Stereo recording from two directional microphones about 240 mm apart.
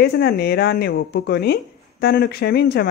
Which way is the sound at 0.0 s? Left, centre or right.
Left.